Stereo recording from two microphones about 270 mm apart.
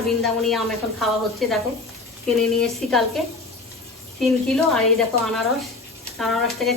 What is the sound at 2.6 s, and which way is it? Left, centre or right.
Speech, centre.